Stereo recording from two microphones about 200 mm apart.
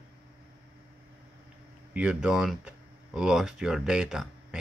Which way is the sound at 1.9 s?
5° right (ahead or behind).